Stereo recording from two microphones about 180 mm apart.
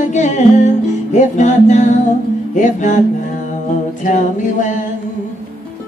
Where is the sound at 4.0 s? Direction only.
45° left (ahead or behind).